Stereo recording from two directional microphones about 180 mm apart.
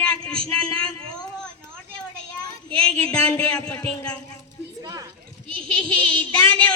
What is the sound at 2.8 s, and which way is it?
Speech, 5° left (ahead or behind).